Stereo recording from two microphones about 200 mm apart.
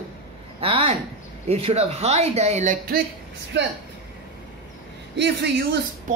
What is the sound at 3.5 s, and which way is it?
Speech, 60° right (ahead or behind).